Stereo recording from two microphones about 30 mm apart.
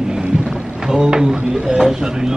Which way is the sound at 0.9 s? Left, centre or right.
Right.